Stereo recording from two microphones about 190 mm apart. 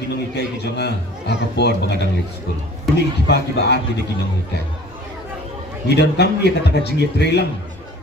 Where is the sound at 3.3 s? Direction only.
60° left (ahead or behind).